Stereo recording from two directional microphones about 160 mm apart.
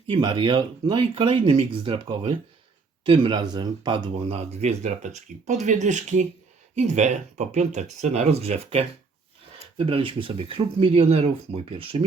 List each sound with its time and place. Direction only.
0.1 s speech: 30° right (ahead or behind)